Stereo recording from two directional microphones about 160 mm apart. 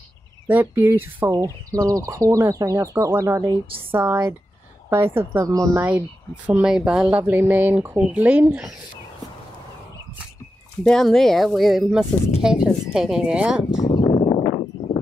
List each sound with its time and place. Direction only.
0.5 s speech: 10° right (ahead or behind)
5.9 s speech: 10° right (ahead or behind)
10.8 s speech: 5° left (ahead or behind)
13.8 s a sound: 30° left (ahead or behind)